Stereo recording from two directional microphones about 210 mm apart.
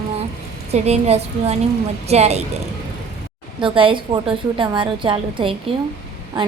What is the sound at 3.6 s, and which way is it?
A woman's voice, 25° right (ahead or behind).